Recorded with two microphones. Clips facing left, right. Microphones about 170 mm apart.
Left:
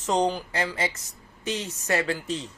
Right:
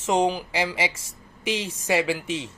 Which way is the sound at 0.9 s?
90° right.